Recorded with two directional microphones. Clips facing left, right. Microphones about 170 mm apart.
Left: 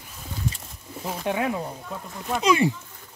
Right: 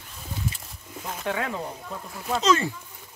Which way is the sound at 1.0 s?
15° left (ahead or behind).